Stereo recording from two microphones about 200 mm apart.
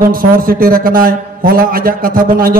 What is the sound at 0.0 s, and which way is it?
A man's voice, 45° right (ahead or behind).